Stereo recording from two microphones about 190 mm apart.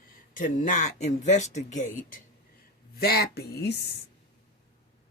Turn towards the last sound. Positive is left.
turn(degrees=60)  # may be behind; listen again after turning